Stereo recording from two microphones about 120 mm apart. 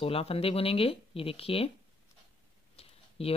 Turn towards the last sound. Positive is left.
turn(degrees=55)  # may be behind; listen again after turning